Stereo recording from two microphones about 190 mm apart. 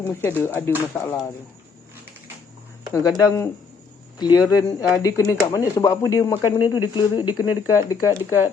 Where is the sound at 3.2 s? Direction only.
15° left (ahead or behind).